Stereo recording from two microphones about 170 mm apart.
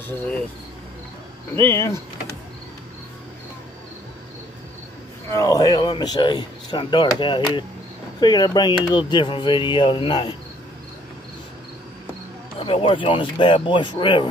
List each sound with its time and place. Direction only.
1.5 s speech: 15° left (ahead or behind)
5.3 s speech: 20° left (ahead or behind)
12.5 s speech: 30° left (ahead or behind)